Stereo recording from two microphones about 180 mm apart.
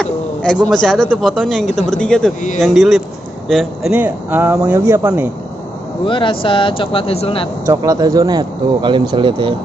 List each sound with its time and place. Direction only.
0.0 s a man's voice: 5° left (ahead or behind); by 5.3 s 10° right (ahead or behind)
6.0 s speech: 25° left (ahead or behind)
7.6 s speech: 20° right (ahead or behind)